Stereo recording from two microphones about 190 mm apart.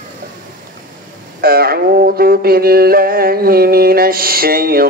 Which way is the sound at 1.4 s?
55° right (ahead or behind).